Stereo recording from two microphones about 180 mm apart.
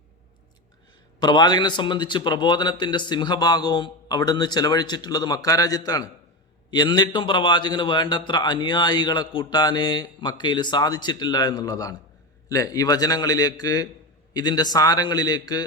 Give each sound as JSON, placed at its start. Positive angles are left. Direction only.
{"t": 1.2, "sound": "a man's voice", "side_deg": 25}